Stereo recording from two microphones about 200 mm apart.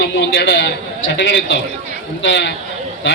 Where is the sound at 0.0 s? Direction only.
60° left (ahead or behind).